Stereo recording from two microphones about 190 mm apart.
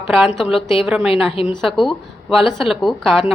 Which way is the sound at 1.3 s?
30° left (ahead or behind).